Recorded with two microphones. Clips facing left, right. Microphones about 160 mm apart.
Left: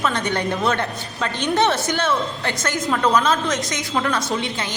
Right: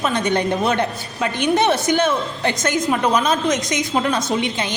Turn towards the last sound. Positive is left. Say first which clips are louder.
# right 3 dB
turn(degrees=-20)  # may be behind; listen again after turning